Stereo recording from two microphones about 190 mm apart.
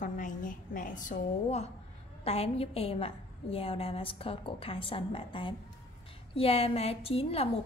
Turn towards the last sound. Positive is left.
turn(degrees=30)  # may be behind; listen again after turning